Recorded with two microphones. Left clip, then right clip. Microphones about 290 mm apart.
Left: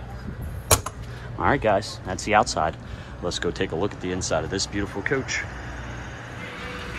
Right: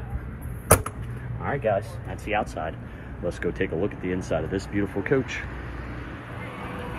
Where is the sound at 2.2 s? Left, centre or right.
Left.